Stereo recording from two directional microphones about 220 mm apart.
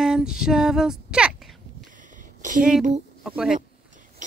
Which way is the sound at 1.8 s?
35° right (ahead or behind).